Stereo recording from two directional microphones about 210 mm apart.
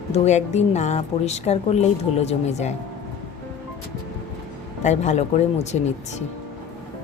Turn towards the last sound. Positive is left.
turn(degrees=35)  # may be behind; listen again after turning